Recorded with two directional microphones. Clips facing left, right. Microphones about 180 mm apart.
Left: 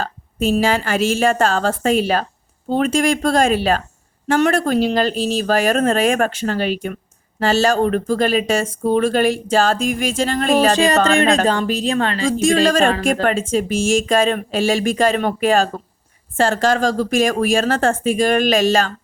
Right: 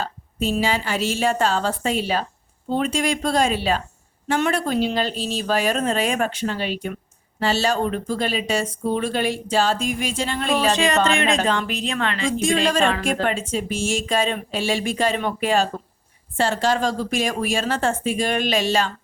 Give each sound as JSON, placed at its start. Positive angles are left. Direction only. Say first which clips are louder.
{"t": 0.6, "sound": "speech", "louder": "left 5 dB", "side_deg": 50}
{"t": 7.8, "sound": "speech", "louder": "left 6 dB", "side_deg": 60}
{"t": 16.8, "sound": "speech", "louder": "left 5 dB", "side_deg": 90}
{"t": 17.2, "sound": "speech", "louder": "left 9 dB", "side_deg": 45}